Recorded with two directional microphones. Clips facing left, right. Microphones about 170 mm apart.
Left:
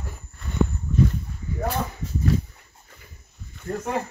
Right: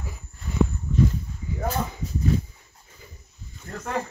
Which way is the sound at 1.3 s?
70° left (ahead or behind).